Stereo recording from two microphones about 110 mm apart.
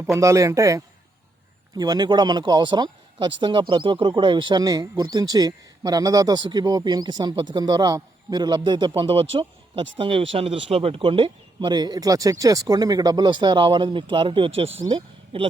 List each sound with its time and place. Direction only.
0.0 s a man's voice: 25° right (ahead or behind)
9.0 s speech: 60° right (ahead or behind)